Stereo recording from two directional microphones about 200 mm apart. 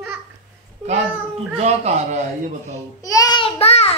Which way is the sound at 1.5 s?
35° right (ahead or behind).